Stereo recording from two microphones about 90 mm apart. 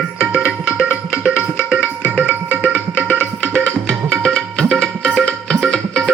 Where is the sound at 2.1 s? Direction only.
20° left (ahead or behind).